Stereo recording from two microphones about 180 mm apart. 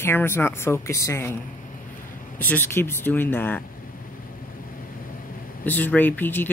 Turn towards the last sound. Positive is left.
turn(degrees=10)  # may be behind; listen again after turning